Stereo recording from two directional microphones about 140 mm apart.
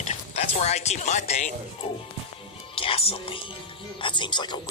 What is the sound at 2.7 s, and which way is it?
Speech, 40° left (ahead or behind).